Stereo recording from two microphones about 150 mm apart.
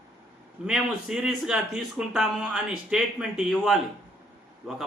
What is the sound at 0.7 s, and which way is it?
Speech, 5° right (ahead or behind).